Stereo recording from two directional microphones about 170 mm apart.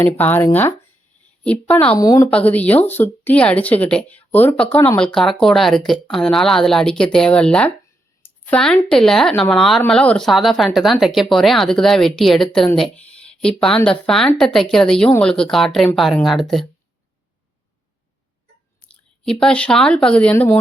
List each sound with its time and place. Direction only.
0.0 s speech: 10° left (ahead or behind)
2.0 s speech: 20° left (ahead or behind)
2.2 s a woman's voice: 10° left (ahead or behind)
19.2 s speech: 5° left (ahead or behind)